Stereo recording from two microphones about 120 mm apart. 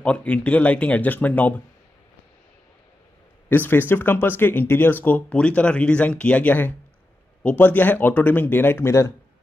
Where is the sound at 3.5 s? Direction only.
15° left (ahead or behind).